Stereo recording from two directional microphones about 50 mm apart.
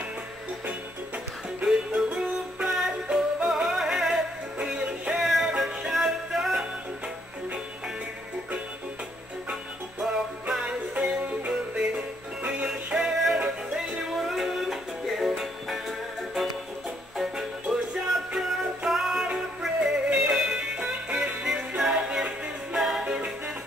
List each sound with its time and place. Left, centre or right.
1.6 s music: centre
3.4 s music: centre
9.5 s music: centre
17.2 s music: centre